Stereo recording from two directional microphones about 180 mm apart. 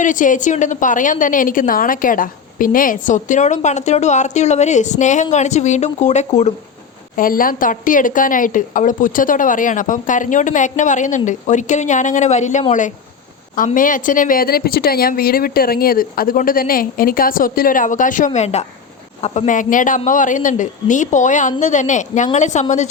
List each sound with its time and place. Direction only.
0.0 s a woman's voice: 45° left (ahead or behind)
7.2 s a woman's voice: 50° left (ahead or behind)